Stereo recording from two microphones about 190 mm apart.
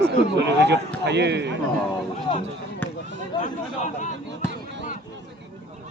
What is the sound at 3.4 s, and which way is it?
Speech, 40° left (ahead or behind).